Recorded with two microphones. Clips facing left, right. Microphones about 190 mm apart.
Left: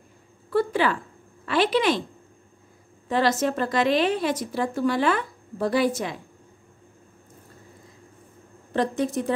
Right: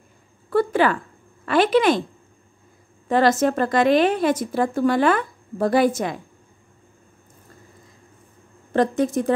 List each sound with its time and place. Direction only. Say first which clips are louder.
0.5 s a woman's voice: right 4 dB; 50° right (ahead or behind)
3.1 s a woman's voice: right 5 dB; 50° right (ahead or behind)
8.7 s a woman's voice: right 5 dB; 45° right (ahead or behind)